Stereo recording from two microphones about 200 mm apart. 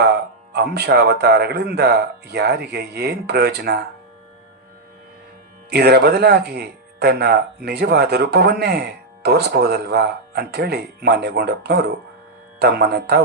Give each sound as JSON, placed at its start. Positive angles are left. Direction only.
{"t": 0.5, "sound": "speech", "side_deg": -55}
{"t": 5.7, "sound": "speech", "side_deg": -55}